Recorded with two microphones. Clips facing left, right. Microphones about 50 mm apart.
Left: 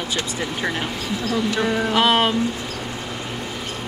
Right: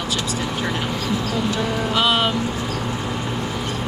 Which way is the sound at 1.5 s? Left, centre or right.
Left.